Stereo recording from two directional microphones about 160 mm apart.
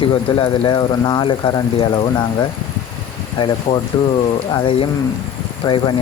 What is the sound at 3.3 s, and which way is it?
Speech, 30° left (ahead or behind).